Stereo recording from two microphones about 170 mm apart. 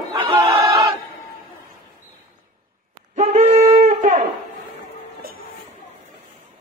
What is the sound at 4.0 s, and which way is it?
Shofar, 50° right (ahead or behind).